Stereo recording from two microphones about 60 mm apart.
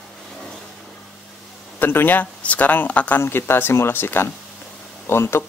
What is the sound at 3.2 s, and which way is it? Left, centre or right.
Speech, left.